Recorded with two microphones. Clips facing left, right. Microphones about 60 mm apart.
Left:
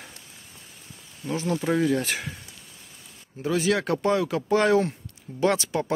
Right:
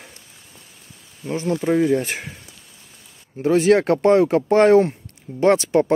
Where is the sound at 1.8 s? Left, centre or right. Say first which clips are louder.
Right 5 dB; right.